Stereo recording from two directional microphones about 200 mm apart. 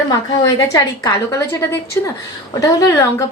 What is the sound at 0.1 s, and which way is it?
A woman's voice, 15° left (ahead or behind).